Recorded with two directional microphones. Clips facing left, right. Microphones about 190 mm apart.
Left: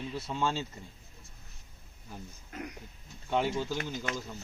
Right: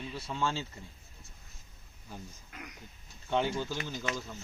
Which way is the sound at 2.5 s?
35° left (ahead or behind).